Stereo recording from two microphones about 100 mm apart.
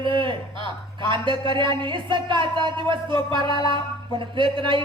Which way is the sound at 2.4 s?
55° right (ahead or behind).